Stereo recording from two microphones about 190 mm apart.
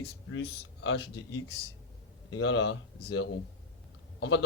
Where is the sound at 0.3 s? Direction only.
70° left (ahead or behind).